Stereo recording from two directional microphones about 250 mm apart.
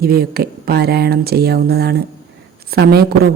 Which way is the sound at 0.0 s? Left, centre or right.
Right.